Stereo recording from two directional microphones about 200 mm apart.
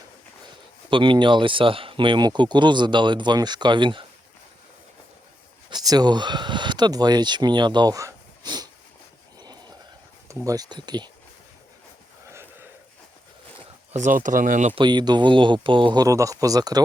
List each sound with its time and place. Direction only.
0.9 s speech: 25° right (ahead or behind)
5.7 s speech: 20° right (ahead or behind)
9.4 s a sound: 20° right (ahead or behind)
10.2 s speech: 15° right (ahead or behind)
12.3 s a sound: 10° right (ahead or behind)
13.9 s speech: 40° right (ahead or behind)
14.8 s speech: 20° right (ahead or behind)